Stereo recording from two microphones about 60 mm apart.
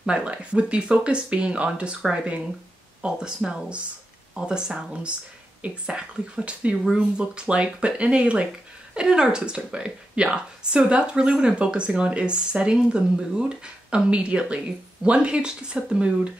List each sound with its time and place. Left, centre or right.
0.0 s speech: centre